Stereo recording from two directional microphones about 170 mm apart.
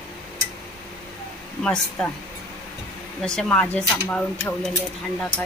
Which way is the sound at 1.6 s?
5° left (ahead or behind).